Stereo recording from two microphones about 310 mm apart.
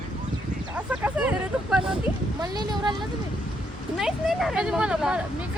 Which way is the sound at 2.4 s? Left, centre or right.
Centre.